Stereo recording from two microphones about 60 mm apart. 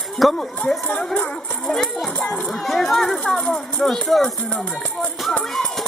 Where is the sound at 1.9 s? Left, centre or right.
Centre.